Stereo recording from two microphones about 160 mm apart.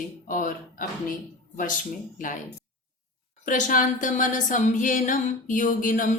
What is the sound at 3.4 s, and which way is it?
Speech, 55° left (ahead or behind).